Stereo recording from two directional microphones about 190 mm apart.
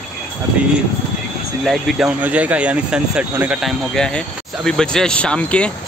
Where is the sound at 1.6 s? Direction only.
Centre (ahead or behind).